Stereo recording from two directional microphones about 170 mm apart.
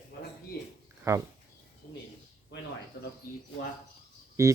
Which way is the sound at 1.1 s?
20° right (ahead or behind).